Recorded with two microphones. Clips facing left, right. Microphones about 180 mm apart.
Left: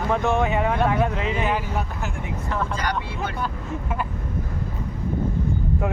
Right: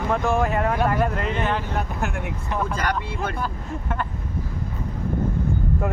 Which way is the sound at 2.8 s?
55° right (ahead or behind).